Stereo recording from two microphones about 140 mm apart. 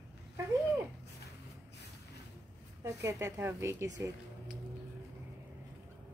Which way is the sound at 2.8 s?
20° right (ahead or behind).